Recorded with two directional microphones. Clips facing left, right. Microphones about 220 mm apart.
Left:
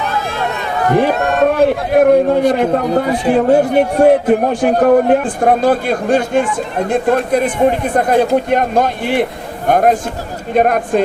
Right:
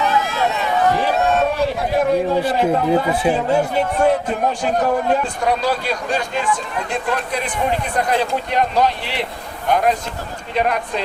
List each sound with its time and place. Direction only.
0.5 s a man's voice: 55° left (ahead or behind)